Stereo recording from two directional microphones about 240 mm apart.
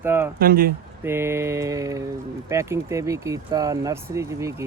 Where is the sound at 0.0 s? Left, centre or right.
Centre.